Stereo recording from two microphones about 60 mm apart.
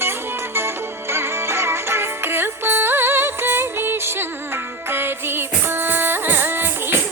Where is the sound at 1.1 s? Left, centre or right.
Right.